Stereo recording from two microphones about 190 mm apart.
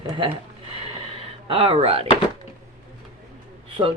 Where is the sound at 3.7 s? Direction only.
25° right (ahead or behind).